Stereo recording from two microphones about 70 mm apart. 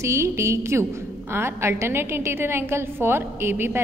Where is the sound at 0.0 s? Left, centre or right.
Right.